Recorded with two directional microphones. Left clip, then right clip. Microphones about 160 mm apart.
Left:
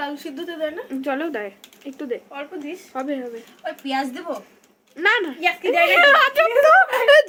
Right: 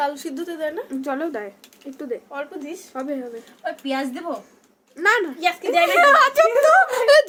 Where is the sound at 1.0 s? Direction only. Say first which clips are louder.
Left 2 dB; 5° right (ahead or behind).